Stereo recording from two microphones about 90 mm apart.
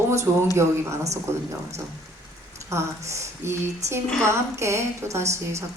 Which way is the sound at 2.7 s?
30° right (ahead or behind).